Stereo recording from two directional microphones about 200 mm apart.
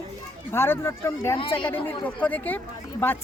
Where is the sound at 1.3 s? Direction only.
25° left (ahead or behind).